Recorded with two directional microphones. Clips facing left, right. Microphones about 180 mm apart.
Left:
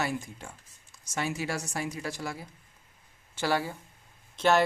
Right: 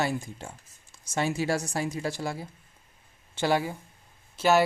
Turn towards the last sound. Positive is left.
turn(degrees=-5)  # may be behind; listen again after turning